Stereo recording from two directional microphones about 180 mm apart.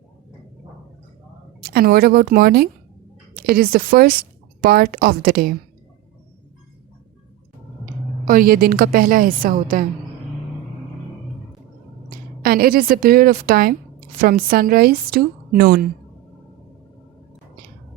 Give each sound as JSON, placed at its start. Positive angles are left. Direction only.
{"t": 1.6, "sound": "a woman's voice", "side_deg": -60}
{"t": 8.2, "sound": "a woman's voice", "side_deg": -50}
{"t": 12.4, "sound": "a woman's voice", "side_deg": -55}